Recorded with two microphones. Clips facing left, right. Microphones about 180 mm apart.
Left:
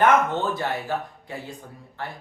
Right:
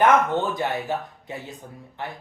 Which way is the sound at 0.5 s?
20° right (ahead or behind).